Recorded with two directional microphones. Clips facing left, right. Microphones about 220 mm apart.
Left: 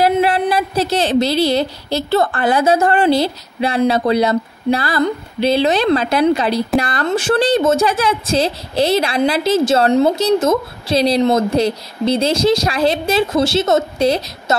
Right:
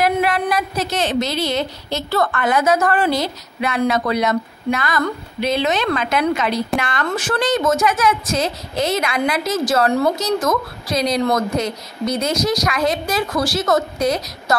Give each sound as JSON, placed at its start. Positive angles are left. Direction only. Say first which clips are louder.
{"t": 0.0, "sound": "a woman's voice", "louder": "left 4 dB", "side_deg": 30}